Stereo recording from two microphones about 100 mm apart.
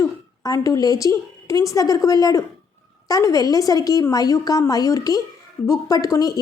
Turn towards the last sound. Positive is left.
turn(degrees=35)  # may be behind; listen again after turning